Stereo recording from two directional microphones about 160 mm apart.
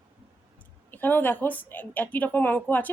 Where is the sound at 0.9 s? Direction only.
10° left (ahead or behind).